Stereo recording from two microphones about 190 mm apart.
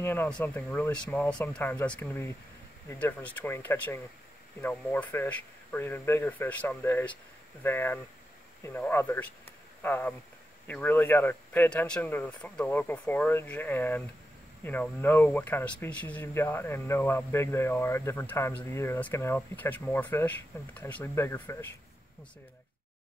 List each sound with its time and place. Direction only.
0.0 s speech: 10° left (ahead or behind)